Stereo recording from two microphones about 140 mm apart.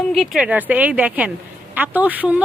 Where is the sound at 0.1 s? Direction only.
5° right (ahead or behind).